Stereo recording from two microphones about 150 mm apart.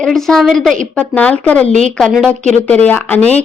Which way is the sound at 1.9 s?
Centre (ahead or behind).